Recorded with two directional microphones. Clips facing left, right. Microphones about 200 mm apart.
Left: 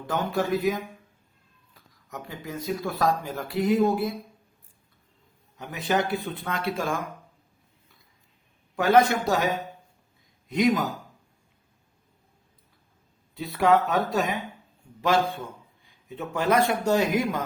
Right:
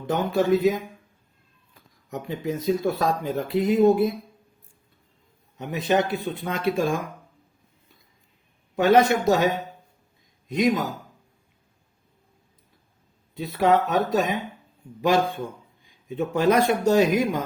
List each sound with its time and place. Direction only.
0.1 s speech: 20° right (ahead or behind)
2.0 s speech: 20° right (ahead or behind)
5.5 s speech: 20° right (ahead or behind)
8.7 s speech: 20° right (ahead or behind)
13.3 s speech: 20° right (ahead or behind)